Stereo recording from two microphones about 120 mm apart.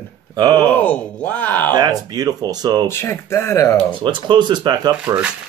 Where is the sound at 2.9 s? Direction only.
20° left (ahead or behind).